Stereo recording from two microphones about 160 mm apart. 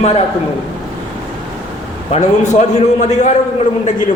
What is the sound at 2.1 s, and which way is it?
A man's voice, 45° left (ahead or behind).